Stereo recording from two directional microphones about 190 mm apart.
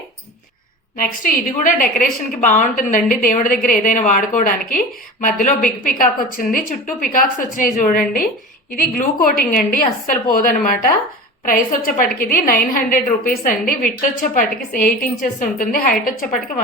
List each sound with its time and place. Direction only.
0.9 s a woman's voice: 45° left (ahead or behind)